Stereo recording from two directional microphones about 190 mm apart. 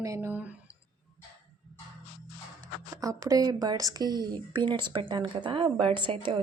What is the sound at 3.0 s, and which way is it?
Speech, 20° right (ahead or behind).